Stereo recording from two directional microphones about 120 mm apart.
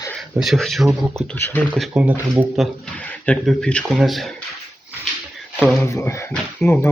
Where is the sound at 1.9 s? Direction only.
10° right (ahead or behind).